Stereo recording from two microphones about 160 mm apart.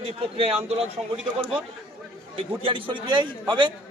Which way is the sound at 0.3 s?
35° right (ahead or behind).